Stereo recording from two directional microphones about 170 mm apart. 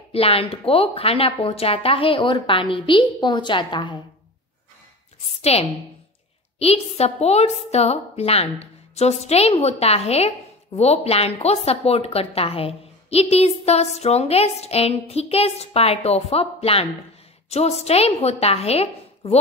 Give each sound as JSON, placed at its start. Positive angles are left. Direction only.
{"t": 0.1, "sound": "speech", "side_deg": 35}
{"t": 5.2, "sound": "speech", "side_deg": 40}